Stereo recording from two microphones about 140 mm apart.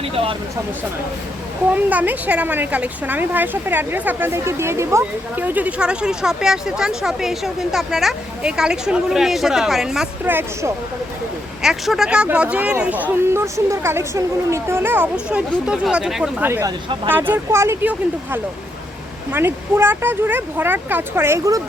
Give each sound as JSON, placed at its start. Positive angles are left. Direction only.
{"t": 0.0, "sound": "speech", "side_deg": -40}
{"t": 1.7, "sound": "speech", "side_deg": -10}
{"t": 11.6, "sound": "speech", "side_deg": -5}
{"t": 16.4, "sound": "speech", "side_deg": -15}